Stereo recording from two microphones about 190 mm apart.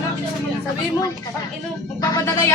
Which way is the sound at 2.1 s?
15° left (ahead or behind).